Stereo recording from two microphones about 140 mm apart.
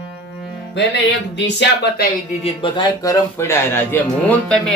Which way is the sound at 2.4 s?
40° left (ahead or behind).